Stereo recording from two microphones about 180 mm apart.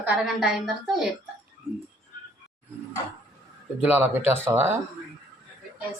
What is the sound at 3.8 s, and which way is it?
A woman's voice, 10° right (ahead or behind).